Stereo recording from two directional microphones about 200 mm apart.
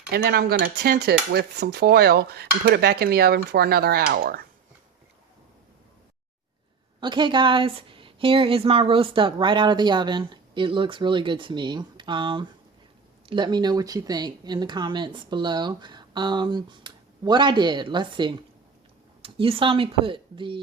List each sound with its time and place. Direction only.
0.1 s stir: 50° right (ahead or behind)
7.0 s a woman's voice: 25° right (ahead or behind)